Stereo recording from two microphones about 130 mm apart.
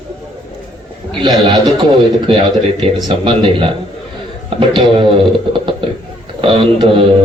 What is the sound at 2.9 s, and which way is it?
Speech, 35° right (ahead or behind).